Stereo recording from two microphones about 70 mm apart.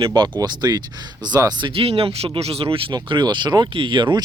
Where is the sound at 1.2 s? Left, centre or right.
Right.